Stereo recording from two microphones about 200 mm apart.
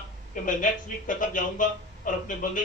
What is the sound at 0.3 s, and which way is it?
A man's voice, 40° left (ahead or behind).